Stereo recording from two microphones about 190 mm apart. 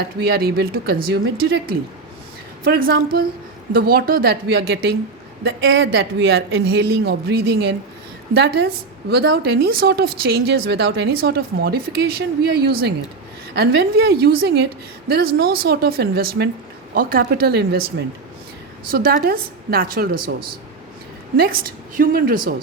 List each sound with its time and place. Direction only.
0.2 s a woman's voice: 55° right (ahead or behind)
18.9 s a woman's voice: 50° right (ahead or behind)